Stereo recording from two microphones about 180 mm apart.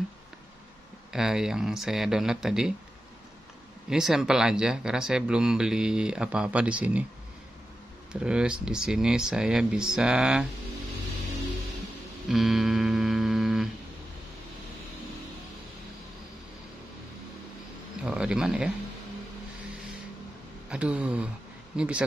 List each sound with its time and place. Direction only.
1.1 s speech: centre (ahead or behind)
3.9 s speech: centre (ahead or behind)
8.1 s speech: 5° right (ahead or behind)
12.3 s music: centre (ahead or behind)
18.0 s speech: 5° right (ahead or behind)
20.7 s speech: 5° right (ahead or behind)